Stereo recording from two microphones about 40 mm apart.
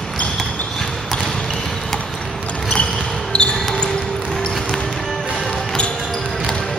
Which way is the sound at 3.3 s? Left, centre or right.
Left.